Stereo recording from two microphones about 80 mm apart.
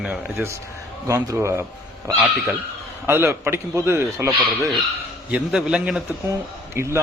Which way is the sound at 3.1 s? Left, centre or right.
Right.